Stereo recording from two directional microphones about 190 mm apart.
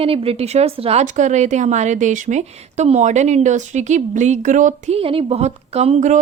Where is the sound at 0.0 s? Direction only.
30° right (ahead or behind).